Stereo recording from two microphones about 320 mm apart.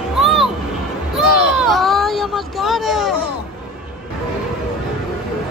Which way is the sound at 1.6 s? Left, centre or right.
Centre.